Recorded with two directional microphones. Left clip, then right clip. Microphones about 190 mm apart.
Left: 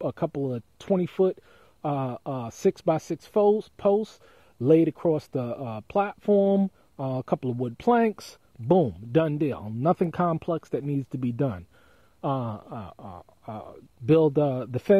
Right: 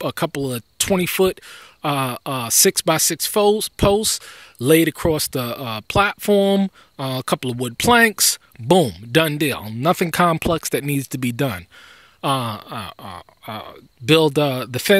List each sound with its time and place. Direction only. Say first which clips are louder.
0.0 s speech: right 6 dB; 15° right (ahead or behind)